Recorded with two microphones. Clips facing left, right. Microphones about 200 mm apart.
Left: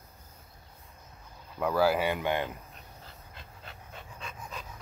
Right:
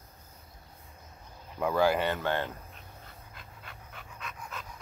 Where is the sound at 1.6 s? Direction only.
5° left (ahead or behind).